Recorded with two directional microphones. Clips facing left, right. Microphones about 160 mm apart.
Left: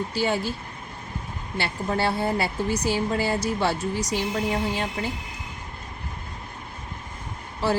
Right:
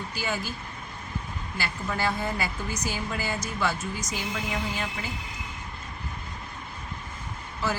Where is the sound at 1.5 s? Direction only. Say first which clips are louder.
Left 5 dB; 30° left (ahead or behind).